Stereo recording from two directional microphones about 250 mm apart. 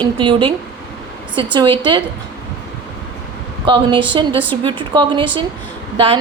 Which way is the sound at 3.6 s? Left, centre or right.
Centre.